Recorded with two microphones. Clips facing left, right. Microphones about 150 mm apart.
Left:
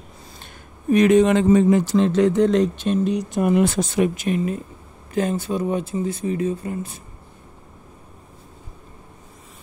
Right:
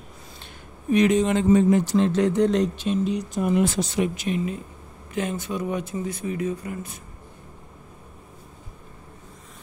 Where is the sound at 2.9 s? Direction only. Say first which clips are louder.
Left 3 dB; 55° left (ahead or behind).